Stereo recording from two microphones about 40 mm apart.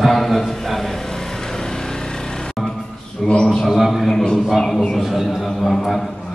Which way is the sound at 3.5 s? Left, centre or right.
Centre.